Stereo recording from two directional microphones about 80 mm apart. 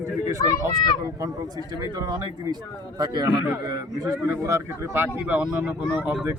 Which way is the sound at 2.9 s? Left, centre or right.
Right.